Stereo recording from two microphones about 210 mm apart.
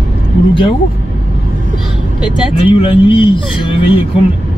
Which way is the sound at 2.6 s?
25° left (ahead or behind).